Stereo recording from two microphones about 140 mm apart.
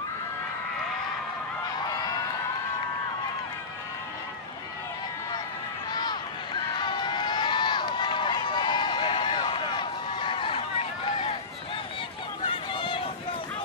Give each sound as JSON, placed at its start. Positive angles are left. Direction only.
{"t": 6.8, "sound": "run", "side_deg": 35}
{"t": 12.4, "sound": "run", "side_deg": 35}